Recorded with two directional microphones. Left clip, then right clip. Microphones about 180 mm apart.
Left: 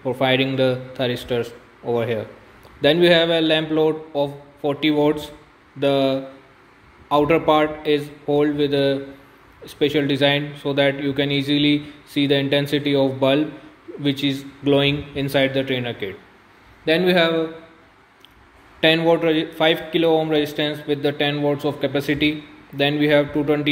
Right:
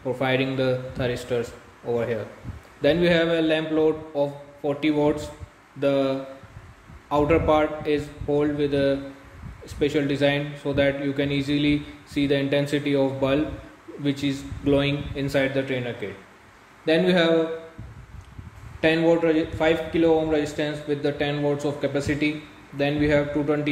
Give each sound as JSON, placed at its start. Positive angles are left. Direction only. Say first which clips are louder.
{"t": 0.0, "sound": "a man's voice", "louder": "left 5 dB", "side_deg": 40}
{"t": 18.8, "sound": "a man's voice", "louder": "left 3 dB", "side_deg": 45}